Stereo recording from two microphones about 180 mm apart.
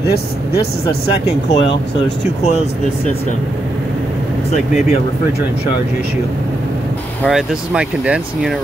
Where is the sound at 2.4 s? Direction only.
40° left (ahead or behind).